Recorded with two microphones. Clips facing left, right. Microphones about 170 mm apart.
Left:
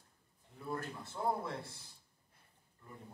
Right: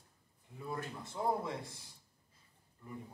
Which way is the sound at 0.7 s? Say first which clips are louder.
Left 1 dB; 15° right (ahead or behind).